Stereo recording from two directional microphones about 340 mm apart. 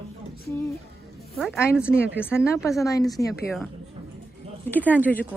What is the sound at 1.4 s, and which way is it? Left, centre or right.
A woman's voice, centre.